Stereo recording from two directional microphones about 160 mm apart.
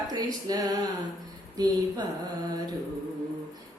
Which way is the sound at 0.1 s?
25° right (ahead or behind).